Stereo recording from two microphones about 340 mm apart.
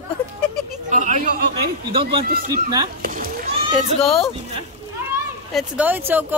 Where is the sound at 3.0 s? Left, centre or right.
Right.